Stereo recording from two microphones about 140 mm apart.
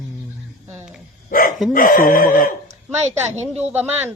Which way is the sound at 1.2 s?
80° left.